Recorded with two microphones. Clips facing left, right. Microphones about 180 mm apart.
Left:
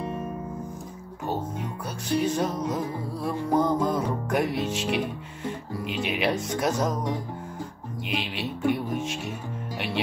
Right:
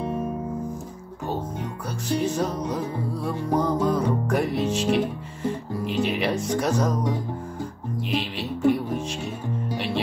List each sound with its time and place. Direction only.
1.3 s music: centre (ahead or behind)
8.1 s music: centre (ahead or behind)